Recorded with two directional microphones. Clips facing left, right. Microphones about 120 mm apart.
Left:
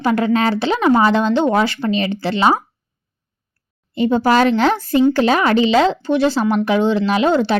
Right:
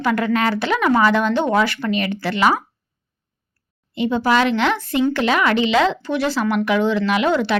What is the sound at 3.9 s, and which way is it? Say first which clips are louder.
A woman's voice: left 3 dB; 40° left (ahead or behind).